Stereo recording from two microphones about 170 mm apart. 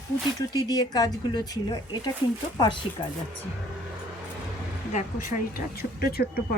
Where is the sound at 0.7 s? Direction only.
20° left (ahead or behind).